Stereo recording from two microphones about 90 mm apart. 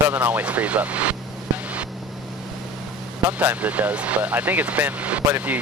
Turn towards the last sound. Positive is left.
turn(degrees=-20)  # may be behind; listen again after turning